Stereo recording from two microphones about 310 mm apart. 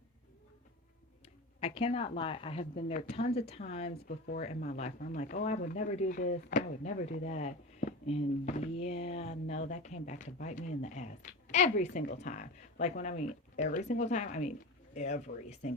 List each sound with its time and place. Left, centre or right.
1.6 s a woman's voice: centre
2.7 s speech: left